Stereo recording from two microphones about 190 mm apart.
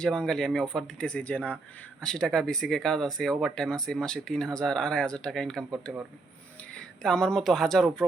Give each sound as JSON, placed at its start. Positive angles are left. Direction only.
{"t": 0.0, "sound": "speech", "side_deg": 5}